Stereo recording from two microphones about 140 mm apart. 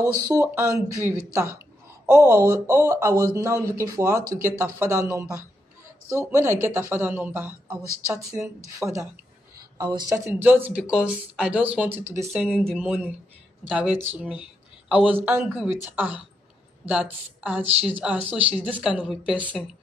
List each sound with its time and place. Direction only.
0.0 s speech: 25° right (ahead or behind)
10.1 s speech: 15° right (ahead or behind); by 12.7 s centre (ahead or behind)
12.7 s speech: 10° right (ahead or behind)